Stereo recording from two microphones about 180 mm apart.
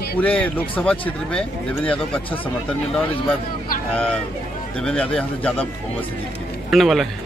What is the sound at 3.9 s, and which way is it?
A man's voice, 5° left (ahead or behind).